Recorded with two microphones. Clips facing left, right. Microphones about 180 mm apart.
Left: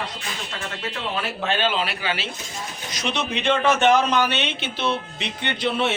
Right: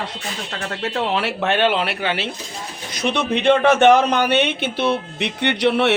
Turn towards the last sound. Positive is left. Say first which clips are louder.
# right 6 dB
turn(degrees=-70)  # may be behind; listen again after turning